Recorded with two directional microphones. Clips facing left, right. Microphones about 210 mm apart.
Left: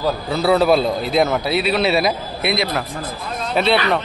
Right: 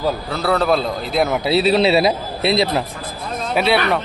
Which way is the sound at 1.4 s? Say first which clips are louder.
Right 3 dB; 30° right (ahead or behind).